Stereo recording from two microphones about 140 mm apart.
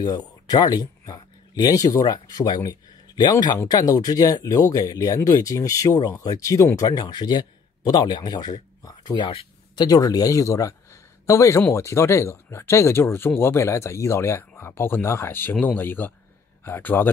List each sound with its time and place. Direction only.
0.0 s speech: 30° left (ahead or behind)
9.8 s a man's voice: 25° left (ahead or behind)